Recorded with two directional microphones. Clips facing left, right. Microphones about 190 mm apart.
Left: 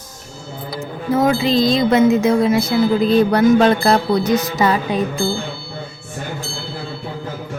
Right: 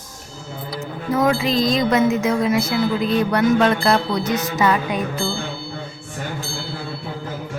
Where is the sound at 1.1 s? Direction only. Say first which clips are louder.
Left 3 dB; 30° left (ahead or behind).